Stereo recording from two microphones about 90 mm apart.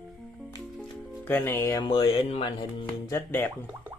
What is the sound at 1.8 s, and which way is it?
Speech, 65° left (ahead or behind).